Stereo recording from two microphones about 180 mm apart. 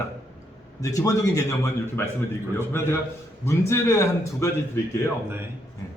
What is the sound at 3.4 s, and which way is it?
A man's voice, 15° left (ahead or behind).